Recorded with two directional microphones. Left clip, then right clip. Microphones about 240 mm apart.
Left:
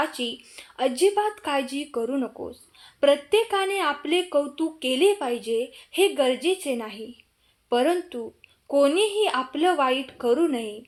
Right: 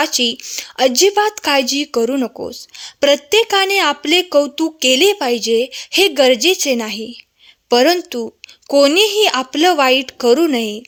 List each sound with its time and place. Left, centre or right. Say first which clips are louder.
0.0 s a woman's voice: right 11 dB; right